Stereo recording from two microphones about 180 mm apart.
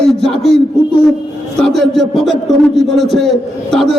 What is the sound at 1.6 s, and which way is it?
A man's voice, centre (ahead or behind).